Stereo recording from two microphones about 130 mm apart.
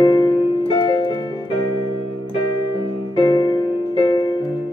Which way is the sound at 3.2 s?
40° left (ahead or behind).